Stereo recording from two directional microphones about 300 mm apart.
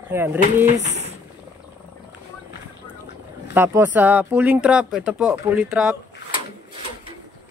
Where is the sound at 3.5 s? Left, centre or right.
Centre.